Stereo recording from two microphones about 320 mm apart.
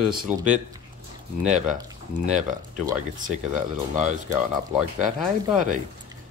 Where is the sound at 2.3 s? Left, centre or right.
Right.